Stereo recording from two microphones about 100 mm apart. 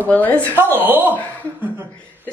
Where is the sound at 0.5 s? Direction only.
20° right (ahead or behind).